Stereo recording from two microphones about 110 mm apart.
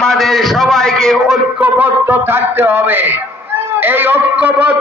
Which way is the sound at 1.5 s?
15° right (ahead or behind).